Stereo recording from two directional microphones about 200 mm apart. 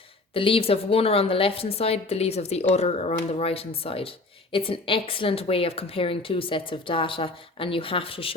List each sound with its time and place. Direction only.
0.3 s speech: 25° left (ahead or behind)